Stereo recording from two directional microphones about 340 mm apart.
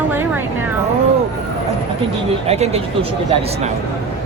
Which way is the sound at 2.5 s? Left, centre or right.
Centre.